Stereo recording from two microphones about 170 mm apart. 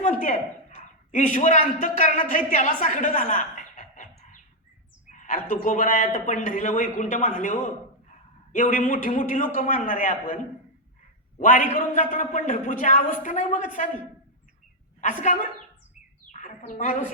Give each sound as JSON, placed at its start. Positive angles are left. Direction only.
{"t": 0.0, "sound": "a man's voice", "side_deg": 50}
{"t": 5.1, "sound": "a man's voice", "side_deg": 50}
{"t": 15.2, "sound": "a man's voice", "side_deg": 45}
{"t": 16.3, "sound": "bird", "side_deg": 45}